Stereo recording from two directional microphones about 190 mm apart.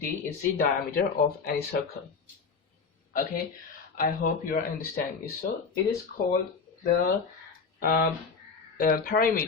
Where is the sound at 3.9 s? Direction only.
45° left (ahead or behind).